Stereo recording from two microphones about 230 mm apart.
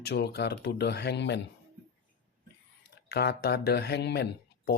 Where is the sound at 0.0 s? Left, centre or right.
Left.